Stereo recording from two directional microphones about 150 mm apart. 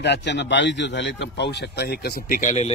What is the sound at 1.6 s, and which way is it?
Speech, 90° left.